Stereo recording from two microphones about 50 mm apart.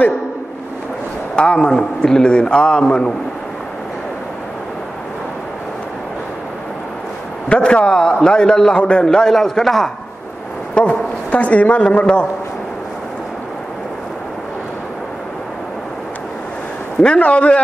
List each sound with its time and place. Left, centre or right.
1.3 s a man's voice: left
7.4 s a man's voice: left; by 9.8 s centre
10.7 s a man's voice: left
17.0 s a man's voice: left